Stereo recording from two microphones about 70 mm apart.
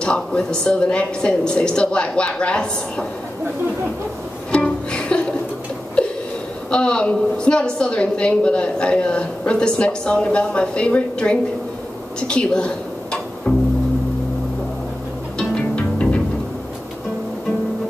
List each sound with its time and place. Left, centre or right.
0.0 s a woman's voice: centre
4.5 s music: centre
6.7 s a woman's voice: centre
13.5 s music: left
15.3 s music: centre